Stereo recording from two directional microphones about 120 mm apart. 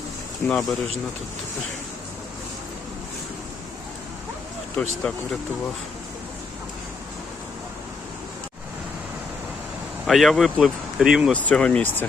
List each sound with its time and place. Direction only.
0.4 s speech: 5° left (ahead or behind)
4.8 s speech: 5° left (ahead or behind)
10.1 s speech: centre (ahead or behind)
11.3 s speech: 10° left (ahead or behind)